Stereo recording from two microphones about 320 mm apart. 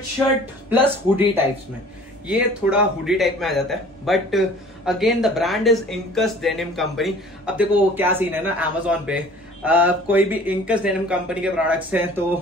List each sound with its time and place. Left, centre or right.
0.7 s speech: centre